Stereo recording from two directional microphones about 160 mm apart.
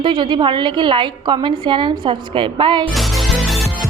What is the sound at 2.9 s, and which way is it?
Music, centre (ahead or behind).